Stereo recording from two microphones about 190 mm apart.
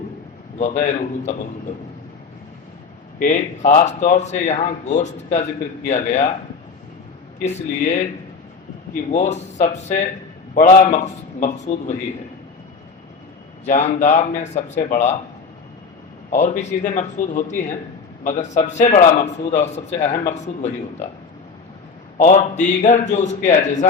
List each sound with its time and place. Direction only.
0.6 s a man's voice: 40° left (ahead or behind)
3.2 s a man's voice: 40° left (ahead or behind)
7.4 s a man's voice: 35° left (ahead or behind)
9.0 s a man's voice: 35° left (ahead or behind)
13.7 s a man's voice: 40° left (ahead or behind)
16.3 s a man's voice: 40° left (ahead or behind)
22.2 s a man's voice: 40° left (ahead or behind)